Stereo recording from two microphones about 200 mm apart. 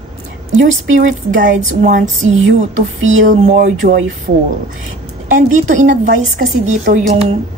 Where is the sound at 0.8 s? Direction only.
75° right (ahead or behind).